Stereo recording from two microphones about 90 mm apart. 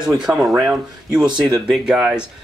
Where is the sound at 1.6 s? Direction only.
5° right (ahead or behind).